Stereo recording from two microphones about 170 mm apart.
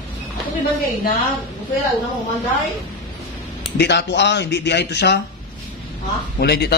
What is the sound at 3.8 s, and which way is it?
Speech, 90° left.